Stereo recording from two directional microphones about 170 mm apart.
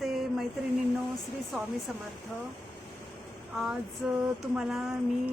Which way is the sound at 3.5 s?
5° right (ahead or behind).